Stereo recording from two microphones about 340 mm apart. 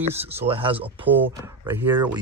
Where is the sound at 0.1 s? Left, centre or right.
Centre.